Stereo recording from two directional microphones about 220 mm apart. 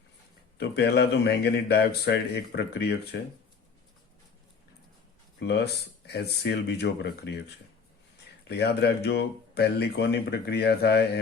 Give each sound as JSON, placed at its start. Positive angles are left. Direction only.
{"t": 0.6, "sound": "speech", "side_deg": 50}
{"t": 5.4, "sound": "speech", "side_deg": 50}
{"t": 8.4, "sound": "speech", "side_deg": 45}